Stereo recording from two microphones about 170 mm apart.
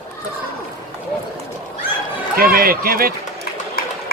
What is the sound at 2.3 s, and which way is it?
Speech, 60° right (ahead or behind).